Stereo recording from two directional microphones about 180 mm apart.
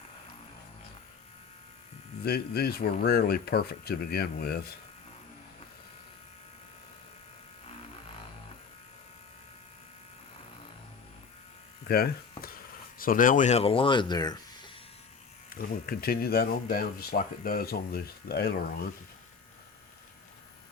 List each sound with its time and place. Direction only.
2.2 s speech: 60° left (ahead or behind)
11.9 s speech: 55° left (ahead or behind); by 14.3 s 20° left (ahead or behind)
15.4 s speech: 55° left (ahead or behind)